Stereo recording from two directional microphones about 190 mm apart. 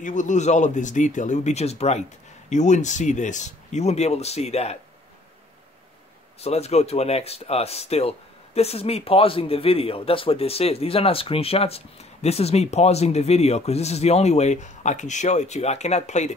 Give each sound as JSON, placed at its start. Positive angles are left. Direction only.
{"t": 0.0, "sound": "speech", "side_deg": 40}
{"t": 6.4, "sound": "speech", "side_deg": 35}